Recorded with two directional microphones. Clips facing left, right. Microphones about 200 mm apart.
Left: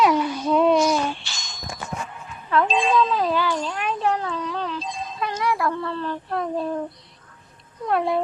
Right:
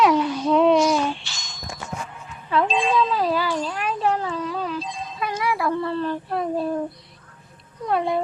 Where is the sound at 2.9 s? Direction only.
5° right (ahead or behind).